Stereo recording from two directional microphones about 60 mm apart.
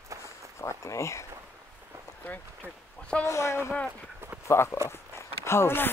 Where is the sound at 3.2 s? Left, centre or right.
Left.